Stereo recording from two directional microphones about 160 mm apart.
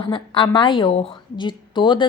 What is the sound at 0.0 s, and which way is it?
A woman's voice, 30° left (ahead or behind).